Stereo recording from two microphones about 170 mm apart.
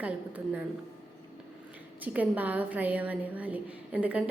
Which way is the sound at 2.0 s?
10° right (ahead or behind).